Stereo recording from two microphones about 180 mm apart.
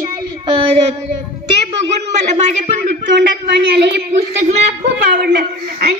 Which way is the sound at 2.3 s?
40° right (ahead or behind).